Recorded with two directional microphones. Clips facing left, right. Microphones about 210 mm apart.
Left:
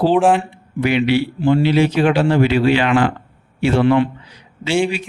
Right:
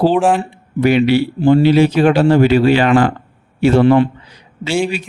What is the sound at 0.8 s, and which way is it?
A man's voice, 40° right (ahead or behind).